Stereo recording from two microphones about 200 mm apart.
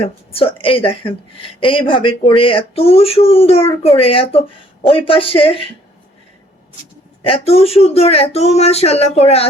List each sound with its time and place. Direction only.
0.0 s speech: 30° left (ahead or behind)
7.3 s speech: 30° left (ahead or behind)